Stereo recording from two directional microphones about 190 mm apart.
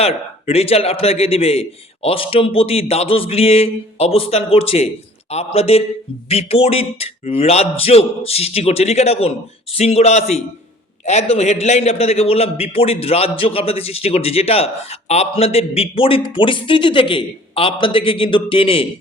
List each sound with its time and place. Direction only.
0.0 s a man's voice: 30° left (ahead or behind)